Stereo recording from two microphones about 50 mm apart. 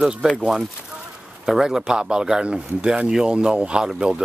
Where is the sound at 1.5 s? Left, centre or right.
Centre.